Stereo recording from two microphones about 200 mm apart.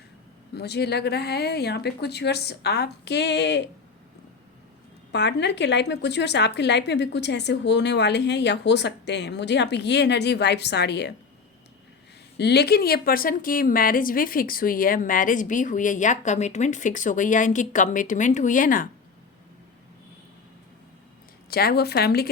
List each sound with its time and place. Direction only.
0.5 s a woman's voice: 55° left (ahead or behind)
5.1 s a woman's voice: 60° left (ahead or behind)
12.4 s a woman's voice: 55° left (ahead or behind)
21.5 s a woman's voice: 50° left (ahead or behind)